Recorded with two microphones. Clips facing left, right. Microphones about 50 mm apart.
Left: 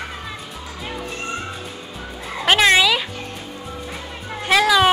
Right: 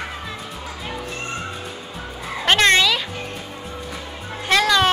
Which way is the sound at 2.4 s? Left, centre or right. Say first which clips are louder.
Left 1 dB; centre.